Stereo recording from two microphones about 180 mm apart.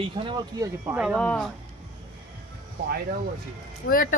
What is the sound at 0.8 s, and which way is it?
Speech, 5° right (ahead or behind).